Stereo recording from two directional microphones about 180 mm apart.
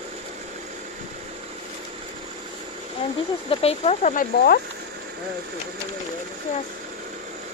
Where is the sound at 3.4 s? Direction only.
35° left (ahead or behind); by 4.6 s 55° left (ahead or behind).